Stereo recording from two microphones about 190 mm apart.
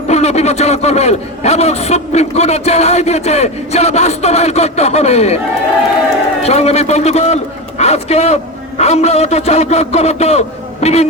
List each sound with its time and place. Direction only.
0.1 s a man's voice: 35° left (ahead or behind)
6.4 s a man's voice: 35° left (ahead or behind)